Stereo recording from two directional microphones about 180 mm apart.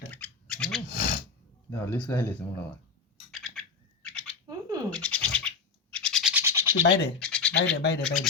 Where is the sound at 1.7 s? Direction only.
15° left (ahead or behind).